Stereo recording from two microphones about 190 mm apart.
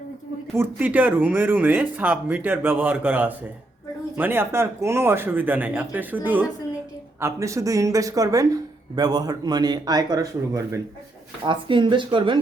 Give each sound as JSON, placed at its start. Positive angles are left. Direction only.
{"t": 0.5, "sound": "speech", "side_deg": -10}